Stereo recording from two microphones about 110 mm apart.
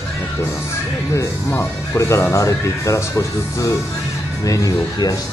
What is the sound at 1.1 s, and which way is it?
Speech, 20° left (ahead or behind).